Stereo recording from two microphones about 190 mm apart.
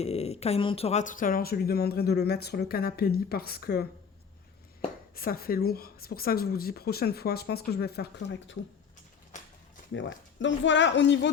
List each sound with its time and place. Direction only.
0.0 s speech: 35° left (ahead or behind); by 3.8 s 55° left (ahead or behind)
5.1 s speech: 50° left (ahead or behind)
9.9 s a woman's voice: 75° left (ahead or behind)